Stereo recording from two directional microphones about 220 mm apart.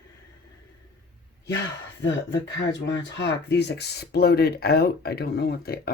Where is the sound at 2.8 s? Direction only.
55° left (ahead or behind).